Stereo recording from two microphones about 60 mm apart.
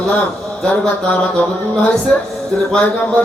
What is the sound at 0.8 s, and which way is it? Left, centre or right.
A woman's voice, centre.